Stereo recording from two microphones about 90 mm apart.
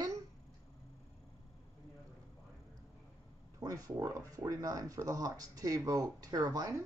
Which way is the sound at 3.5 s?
40° right (ahead or behind).